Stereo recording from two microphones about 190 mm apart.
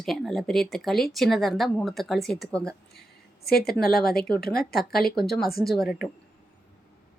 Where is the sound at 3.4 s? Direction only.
55° left (ahead or behind).